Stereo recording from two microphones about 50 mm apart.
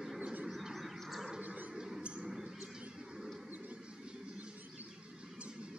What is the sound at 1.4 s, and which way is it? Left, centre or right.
Bird, right.